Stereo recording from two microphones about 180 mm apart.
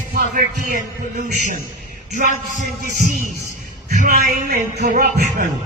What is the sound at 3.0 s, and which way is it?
A man's voice, 45° right (ahead or behind).